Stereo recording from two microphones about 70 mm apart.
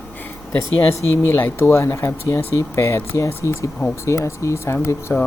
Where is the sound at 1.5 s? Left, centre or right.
Left.